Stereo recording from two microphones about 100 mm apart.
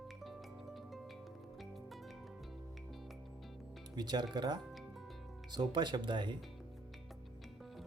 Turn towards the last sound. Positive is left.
turn(degrees=-50)  # may be behind; listen again after turning